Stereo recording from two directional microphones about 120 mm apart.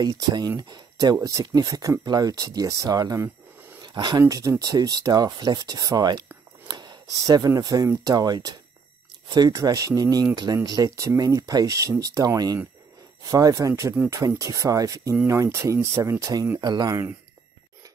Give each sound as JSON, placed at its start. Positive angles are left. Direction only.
{"t": 0.0, "sound": "speech", "side_deg": -35}